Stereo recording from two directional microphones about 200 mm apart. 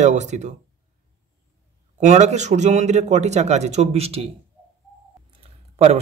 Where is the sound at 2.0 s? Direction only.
35° right (ahead or behind).